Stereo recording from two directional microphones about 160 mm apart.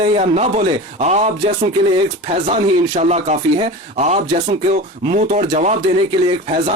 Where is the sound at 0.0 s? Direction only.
45° right (ahead or behind).